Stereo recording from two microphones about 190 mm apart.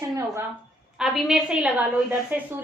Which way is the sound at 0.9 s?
Centre (ahead or behind).